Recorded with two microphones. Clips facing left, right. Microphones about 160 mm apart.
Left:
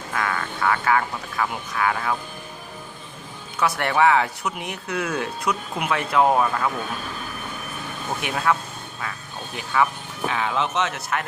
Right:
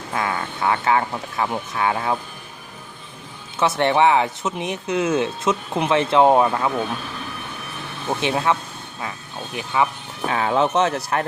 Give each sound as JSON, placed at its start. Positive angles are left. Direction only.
{"t": 0.1, "sound": "speech", "side_deg": -25}
{"t": 3.6, "sound": "speech", "side_deg": -25}
{"t": 8.2, "sound": "speech", "side_deg": -25}
{"t": 9.6, "sound": "speech", "side_deg": -20}
{"t": 10.2, "sound": "speech", "side_deg": -40}